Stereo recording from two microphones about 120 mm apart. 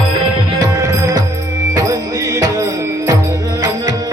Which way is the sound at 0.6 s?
25° right (ahead or behind).